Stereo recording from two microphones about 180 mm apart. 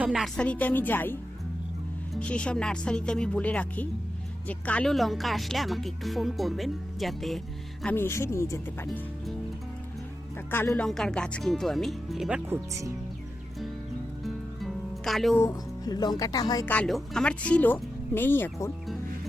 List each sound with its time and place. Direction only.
0.0 s speech: 5° right (ahead or behind)
7.9 s speech: 15° left (ahead or behind)
10.5 s speech: 10° left (ahead or behind); by 12.5 s 5° right (ahead or behind)
14.3 s music: centre (ahead or behind)
15.4 s speech: 20° left (ahead or behind)
16.6 s speech: 5° left (ahead or behind)